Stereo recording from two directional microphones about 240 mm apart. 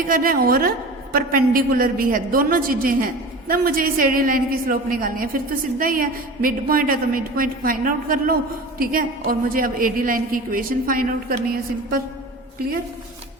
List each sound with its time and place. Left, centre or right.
0.1 s a woman's voice: right